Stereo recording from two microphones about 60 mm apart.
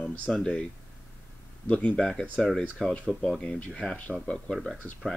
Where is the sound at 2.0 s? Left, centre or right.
Centre.